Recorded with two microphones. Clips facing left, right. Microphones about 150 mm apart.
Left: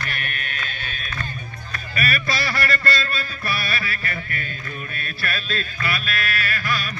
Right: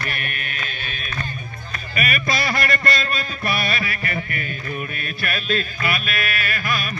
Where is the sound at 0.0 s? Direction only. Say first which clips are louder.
Right 1 dB; 5° right (ahead or behind).